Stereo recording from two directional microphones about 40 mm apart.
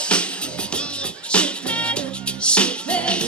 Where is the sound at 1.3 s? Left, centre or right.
Left.